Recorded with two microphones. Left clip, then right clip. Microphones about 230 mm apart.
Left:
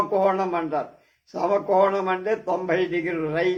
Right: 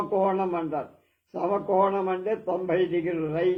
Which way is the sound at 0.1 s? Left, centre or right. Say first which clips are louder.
Left 3 dB; left.